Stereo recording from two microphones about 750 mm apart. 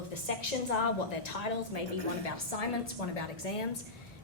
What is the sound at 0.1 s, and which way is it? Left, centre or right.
A woman's voice, left.